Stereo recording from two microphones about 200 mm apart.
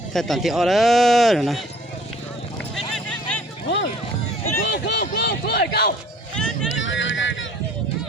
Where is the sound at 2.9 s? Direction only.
5° left (ahead or behind).